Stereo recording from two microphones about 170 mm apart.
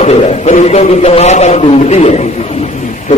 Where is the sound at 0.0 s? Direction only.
40° left (ahead or behind).